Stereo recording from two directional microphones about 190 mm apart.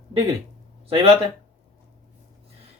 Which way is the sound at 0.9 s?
30° right (ahead or behind).